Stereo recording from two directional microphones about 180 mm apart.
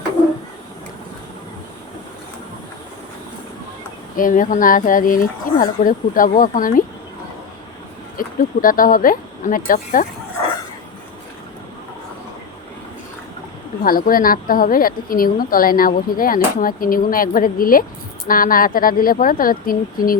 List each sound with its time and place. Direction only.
4.2 s a woman's voice: 50° left (ahead or behind)
8.2 s a woman's voice: 50° left (ahead or behind)
13.8 s a woman's voice: 55° left (ahead or behind)